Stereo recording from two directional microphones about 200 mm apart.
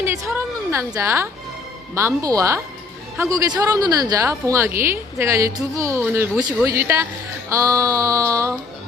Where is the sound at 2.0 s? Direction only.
15° right (ahead or behind).